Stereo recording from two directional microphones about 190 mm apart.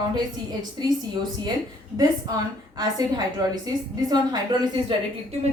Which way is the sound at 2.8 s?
20° right (ahead or behind).